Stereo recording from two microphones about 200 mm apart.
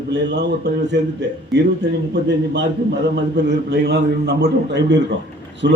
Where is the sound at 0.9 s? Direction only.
60° right (ahead or behind).